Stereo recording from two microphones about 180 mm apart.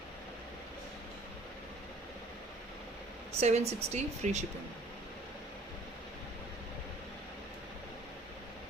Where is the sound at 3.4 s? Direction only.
35° right (ahead or behind).